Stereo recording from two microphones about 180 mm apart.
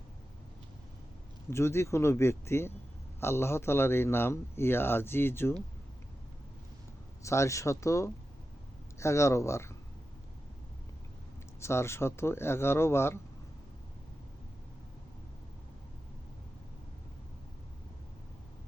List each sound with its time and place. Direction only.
1.5 s a man's voice: 15° left (ahead or behind)
7.2 s a man's voice: 15° left (ahead or behind)
11.6 s a man's voice: 15° left (ahead or behind)